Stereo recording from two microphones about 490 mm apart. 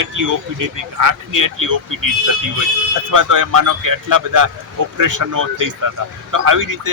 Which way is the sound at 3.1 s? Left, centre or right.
Right.